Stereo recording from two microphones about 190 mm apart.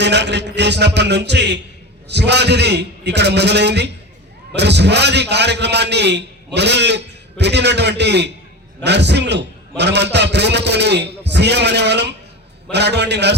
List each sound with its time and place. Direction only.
0.0 s a man's voice: 65° right (ahead or behind)